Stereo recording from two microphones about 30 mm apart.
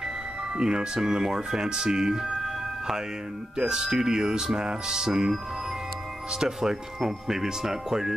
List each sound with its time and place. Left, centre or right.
0.6 s speech: right
2.1 s music: centre
3.5 s speech: right
6.4 s speech: centre